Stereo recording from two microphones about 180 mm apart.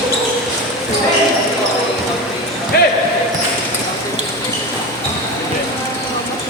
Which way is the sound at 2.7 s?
65° left (ahead or behind).